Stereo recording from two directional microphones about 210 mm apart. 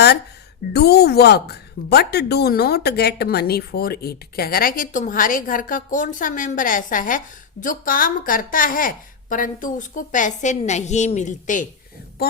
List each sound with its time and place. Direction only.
0.7 s a woman's voice: 50° left (ahead or behind)